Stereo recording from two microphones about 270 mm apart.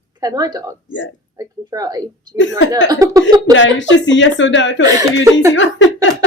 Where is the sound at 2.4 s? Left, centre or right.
Left.